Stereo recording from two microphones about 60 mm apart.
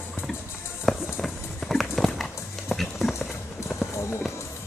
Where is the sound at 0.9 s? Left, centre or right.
Centre.